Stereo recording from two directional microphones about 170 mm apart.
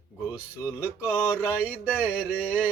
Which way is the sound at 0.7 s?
10° right (ahead or behind).